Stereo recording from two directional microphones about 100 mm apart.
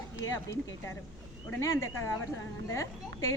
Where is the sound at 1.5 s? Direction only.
30° left (ahead or behind).